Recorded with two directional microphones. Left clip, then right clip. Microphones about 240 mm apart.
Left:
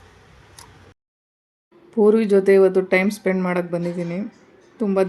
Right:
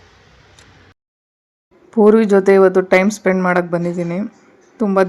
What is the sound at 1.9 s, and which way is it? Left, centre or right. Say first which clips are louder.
Speech: right 5 dB; centre.